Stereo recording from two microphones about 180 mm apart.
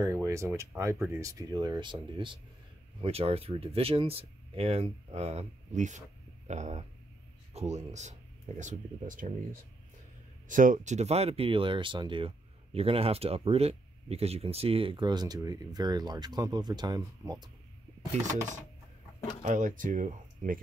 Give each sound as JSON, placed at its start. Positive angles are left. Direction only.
{"t": 0.0, "sound": "speech", "side_deg": -15}
{"t": 19.4, "sound": "speech", "side_deg": -45}